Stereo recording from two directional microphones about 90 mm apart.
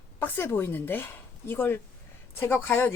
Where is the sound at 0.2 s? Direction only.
25° left (ahead or behind).